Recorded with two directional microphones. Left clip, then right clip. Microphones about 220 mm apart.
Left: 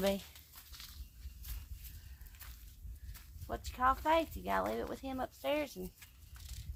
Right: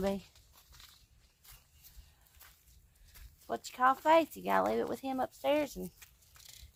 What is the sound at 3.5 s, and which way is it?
Speech, 40° right (ahead or behind).